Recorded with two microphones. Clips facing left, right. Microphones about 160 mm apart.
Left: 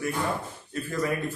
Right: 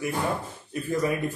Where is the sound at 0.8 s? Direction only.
20° right (ahead or behind).